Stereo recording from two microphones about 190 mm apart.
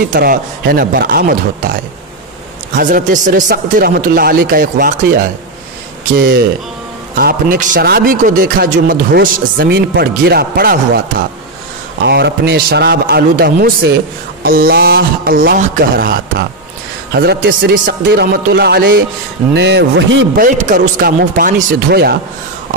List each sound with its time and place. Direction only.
0.1 s a man's voice: 50° right (ahead or behind)
2.8 s a man's voice: 45° right (ahead or behind)
12.1 s a man's voice: 60° right (ahead or behind)
20.3 s a man's voice: 45° right (ahead or behind)